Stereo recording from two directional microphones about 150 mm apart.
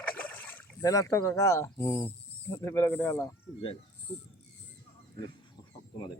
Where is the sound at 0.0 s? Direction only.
10° left (ahead or behind).